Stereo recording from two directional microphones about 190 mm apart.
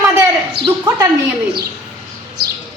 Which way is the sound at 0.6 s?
55° right (ahead or behind).